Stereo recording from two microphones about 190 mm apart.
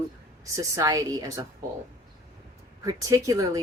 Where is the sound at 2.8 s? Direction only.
20° right (ahead or behind).